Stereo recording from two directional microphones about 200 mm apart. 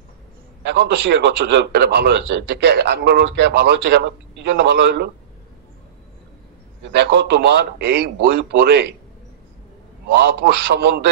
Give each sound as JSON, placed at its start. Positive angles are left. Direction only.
{"t": 0.7, "sound": "a man's voice", "side_deg": -55}
{"t": 7.0, "sound": "a man's voice", "side_deg": -55}
{"t": 10.4, "sound": "a man's voice", "side_deg": -55}